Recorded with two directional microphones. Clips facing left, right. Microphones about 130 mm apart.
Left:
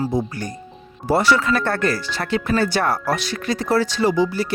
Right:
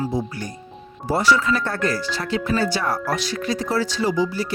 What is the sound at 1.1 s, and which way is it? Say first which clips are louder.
Speech: left 2 dB; 65° left (ahead or behind).